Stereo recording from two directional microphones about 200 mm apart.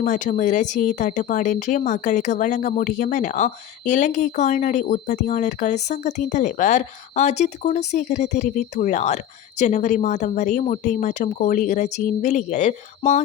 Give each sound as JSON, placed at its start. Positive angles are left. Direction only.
{"t": 0.0, "sound": "speech", "side_deg": 40}